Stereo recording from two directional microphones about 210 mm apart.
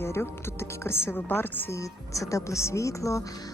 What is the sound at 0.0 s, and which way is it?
A woman's voice, 10° left (ahead or behind).